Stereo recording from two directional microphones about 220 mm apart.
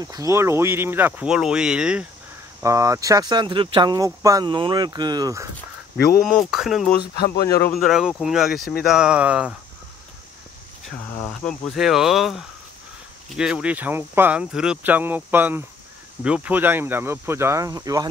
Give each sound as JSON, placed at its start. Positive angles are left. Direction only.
{"t": 0.0, "sound": "speech", "side_deg": -15}
{"t": 6.2, "sound": "speech", "side_deg": 0}
{"t": 11.1, "sound": "cricket", "side_deg": 10}
{"t": 11.7, "sound": "speech", "side_deg": 0}